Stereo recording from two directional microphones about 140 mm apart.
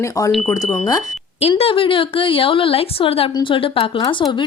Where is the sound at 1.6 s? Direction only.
40° left (ahead or behind).